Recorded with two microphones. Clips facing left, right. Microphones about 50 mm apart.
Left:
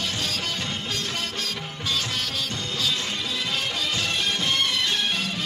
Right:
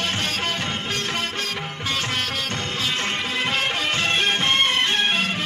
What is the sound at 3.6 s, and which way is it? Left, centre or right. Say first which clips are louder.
Music: right 4 dB; right.